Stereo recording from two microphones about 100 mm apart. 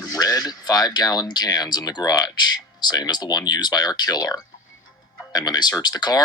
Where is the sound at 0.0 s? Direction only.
40° left (ahead or behind).